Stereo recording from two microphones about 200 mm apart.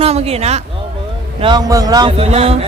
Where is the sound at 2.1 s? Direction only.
30° right (ahead or behind).